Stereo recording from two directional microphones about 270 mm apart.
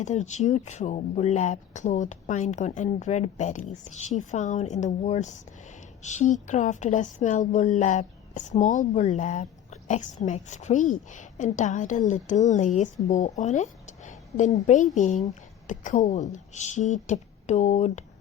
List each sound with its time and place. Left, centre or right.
0.0 s speech: left